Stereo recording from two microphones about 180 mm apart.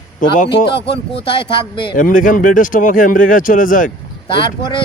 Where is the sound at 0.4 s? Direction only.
65° left (ahead or behind).